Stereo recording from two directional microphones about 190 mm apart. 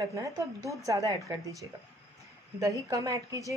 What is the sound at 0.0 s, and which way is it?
A woman's voice, 15° right (ahead or behind).